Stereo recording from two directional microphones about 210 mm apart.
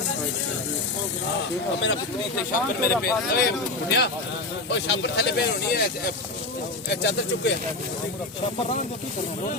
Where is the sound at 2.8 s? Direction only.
45° left (ahead or behind).